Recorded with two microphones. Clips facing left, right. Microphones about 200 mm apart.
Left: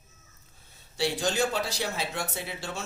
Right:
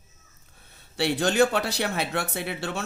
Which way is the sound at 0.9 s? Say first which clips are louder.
Right 6 dB; 65° right (ahead or behind).